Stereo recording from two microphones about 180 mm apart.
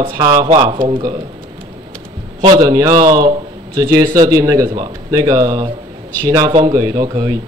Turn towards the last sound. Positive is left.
turn(degrees=-20)  # may be behind; listen again after turning